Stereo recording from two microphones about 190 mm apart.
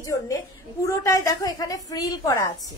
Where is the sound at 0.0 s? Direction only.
15° left (ahead or behind).